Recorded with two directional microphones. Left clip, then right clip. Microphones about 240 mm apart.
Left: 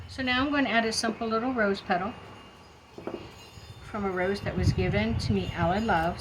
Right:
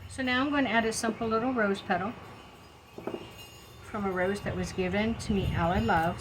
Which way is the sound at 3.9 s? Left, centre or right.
Centre.